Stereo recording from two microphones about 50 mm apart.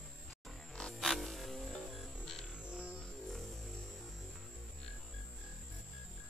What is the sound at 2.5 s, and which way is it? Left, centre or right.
Music, right.